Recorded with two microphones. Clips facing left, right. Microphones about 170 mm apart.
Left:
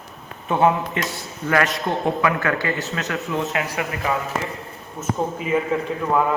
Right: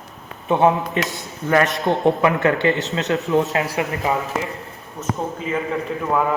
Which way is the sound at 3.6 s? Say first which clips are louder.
Right 3 dB; 30° right (ahead or behind).